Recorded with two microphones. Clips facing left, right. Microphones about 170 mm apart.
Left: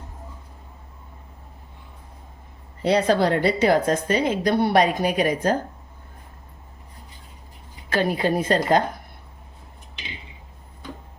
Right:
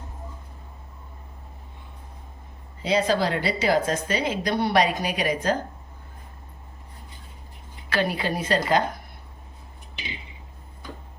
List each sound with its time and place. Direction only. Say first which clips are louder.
2.8 s a woman's voice: left 4 dB; 60° left (ahead or behind)
7.9 s a woman's voice: left 4 dB; 45° left (ahead or behind)